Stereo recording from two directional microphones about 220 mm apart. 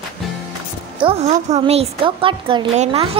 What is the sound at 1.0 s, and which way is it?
A woman's voice, 25° right (ahead or behind).